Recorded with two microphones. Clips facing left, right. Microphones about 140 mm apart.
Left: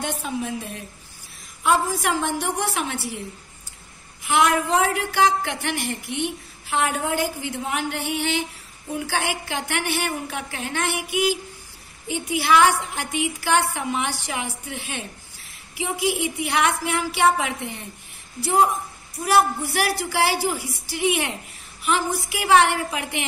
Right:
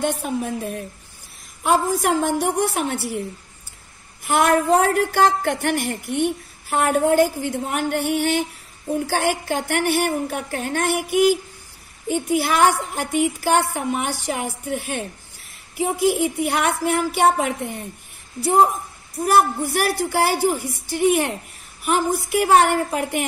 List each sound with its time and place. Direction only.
0.0 s a woman's voice: 50° right (ahead or behind)
4.2 s a woman's voice: 50° right (ahead or behind)
19.2 s a woman's voice: 50° right (ahead or behind)